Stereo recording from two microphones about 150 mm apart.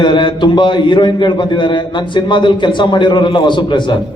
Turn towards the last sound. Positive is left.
turn(degrees=30)  # may be behind; listen again after turning